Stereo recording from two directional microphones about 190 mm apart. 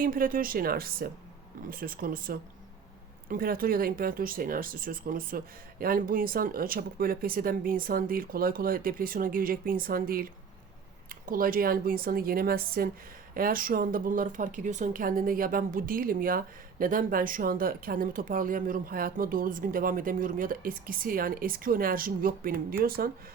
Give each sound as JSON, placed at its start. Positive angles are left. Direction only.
{"t": 0.0, "sound": "speech", "side_deg": -45}